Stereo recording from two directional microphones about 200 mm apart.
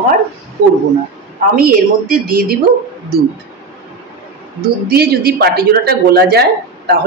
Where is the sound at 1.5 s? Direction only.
45° right (ahead or behind).